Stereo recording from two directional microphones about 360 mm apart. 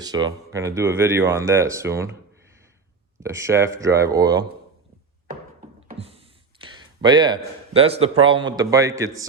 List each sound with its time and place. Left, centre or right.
0.0 s speech: centre
3.2 s speech: centre
5.9 s speech: centre